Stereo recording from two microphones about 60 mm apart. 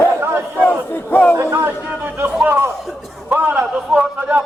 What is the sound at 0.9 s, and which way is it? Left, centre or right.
Crowd, left.